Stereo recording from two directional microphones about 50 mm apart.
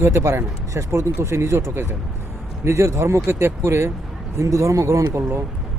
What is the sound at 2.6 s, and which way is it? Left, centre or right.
Speech, right.